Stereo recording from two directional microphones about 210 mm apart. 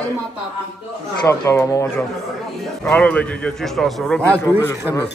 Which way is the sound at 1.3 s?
15° left (ahead or behind).